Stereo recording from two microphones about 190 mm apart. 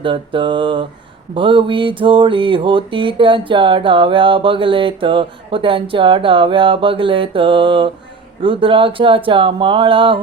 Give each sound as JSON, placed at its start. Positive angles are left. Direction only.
{"t": 0.0, "sound": "mantra", "side_deg": -25}